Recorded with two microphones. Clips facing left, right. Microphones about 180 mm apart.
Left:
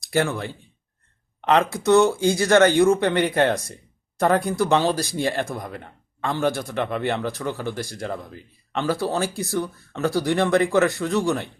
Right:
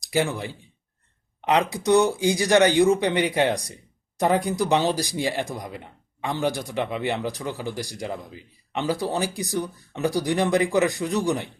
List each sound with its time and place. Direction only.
0.0 s speech: 15° right (ahead or behind)